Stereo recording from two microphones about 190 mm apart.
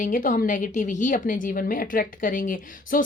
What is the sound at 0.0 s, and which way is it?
A woman's voice, 45° left (ahead or behind).